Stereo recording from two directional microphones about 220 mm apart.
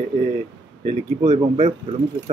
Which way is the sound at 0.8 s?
30° right (ahead or behind).